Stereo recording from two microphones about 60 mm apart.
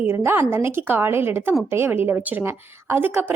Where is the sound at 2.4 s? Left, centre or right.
Right.